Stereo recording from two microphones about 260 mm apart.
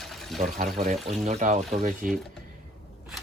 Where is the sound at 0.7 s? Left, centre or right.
Right.